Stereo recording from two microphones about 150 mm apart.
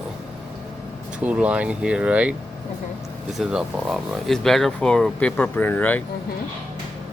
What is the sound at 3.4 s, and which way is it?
Speech, 5° right (ahead or behind).